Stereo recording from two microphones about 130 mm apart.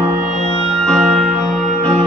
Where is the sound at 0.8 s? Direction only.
5° left (ahead or behind).